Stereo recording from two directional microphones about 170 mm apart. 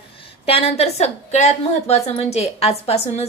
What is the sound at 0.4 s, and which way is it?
Speech, 35° left (ahead or behind).